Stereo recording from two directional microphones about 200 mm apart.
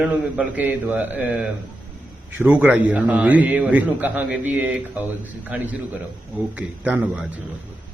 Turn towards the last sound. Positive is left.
turn(degrees=-5)  # may be behind; listen again after turning